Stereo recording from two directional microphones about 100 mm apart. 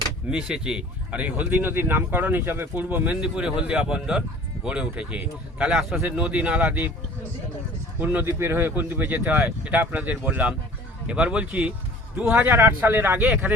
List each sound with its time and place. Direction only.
0.3 s speech: 10° right (ahead or behind)
7.9 s speech: 15° right (ahead or behind)